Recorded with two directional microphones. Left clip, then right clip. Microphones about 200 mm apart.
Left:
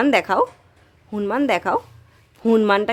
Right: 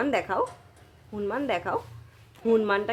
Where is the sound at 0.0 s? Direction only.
50° left (ahead or behind).